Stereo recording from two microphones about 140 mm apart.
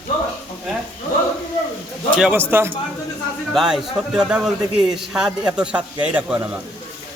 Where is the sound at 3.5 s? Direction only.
5° right (ahead or behind).